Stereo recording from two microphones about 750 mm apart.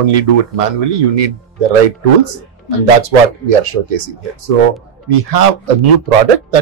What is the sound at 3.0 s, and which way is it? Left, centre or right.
Speech, right.